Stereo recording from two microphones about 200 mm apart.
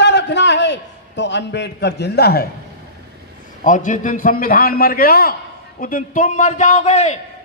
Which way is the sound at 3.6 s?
40° left (ahead or behind).